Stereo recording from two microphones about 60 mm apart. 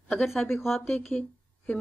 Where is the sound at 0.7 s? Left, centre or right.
Left.